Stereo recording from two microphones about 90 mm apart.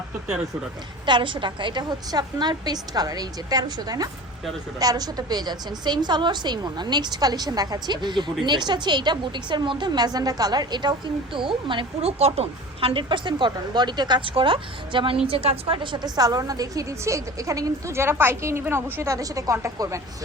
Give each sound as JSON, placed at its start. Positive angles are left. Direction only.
{"t": 1.0, "sound": "a woman's voice", "side_deg": -65}
{"t": 15.3, "sound": "a woman's voice", "side_deg": -90}
{"t": 16.0, "sound": "a woman's voice", "side_deg": -45}